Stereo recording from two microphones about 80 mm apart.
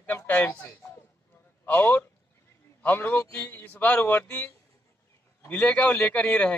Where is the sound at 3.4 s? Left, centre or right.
Left.